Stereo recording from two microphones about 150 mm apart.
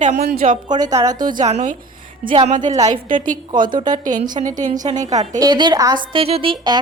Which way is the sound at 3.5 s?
30° right (ahead or behind).